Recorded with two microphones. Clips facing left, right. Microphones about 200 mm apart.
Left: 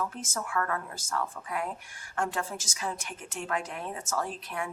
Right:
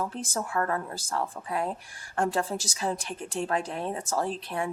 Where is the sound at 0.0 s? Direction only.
30° right (ahead or behind).